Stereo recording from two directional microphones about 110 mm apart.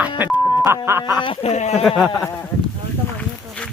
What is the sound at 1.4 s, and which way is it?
Speech, 85° left.